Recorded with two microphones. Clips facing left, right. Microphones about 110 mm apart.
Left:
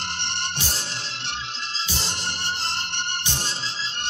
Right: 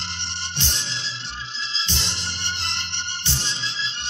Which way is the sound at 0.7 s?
45° left (ahead or behind).